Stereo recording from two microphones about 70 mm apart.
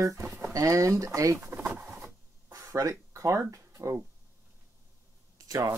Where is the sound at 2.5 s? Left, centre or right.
Right.